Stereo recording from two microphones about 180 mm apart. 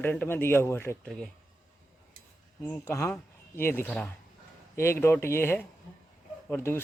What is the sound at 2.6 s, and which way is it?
Speech, 15° left (ahead or behind).